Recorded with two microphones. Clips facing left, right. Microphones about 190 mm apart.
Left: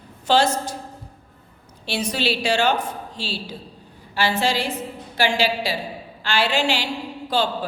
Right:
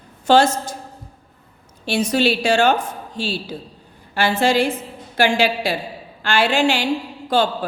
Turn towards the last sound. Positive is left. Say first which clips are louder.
# right 4 dB
turn(degrees=-50)  # may be behind; listen again after turning